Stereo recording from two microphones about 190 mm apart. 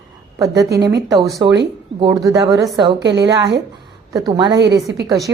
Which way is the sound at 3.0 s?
65° right (ahead or behind).